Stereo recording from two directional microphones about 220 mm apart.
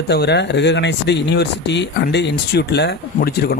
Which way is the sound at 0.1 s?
50° left (ahead or behind).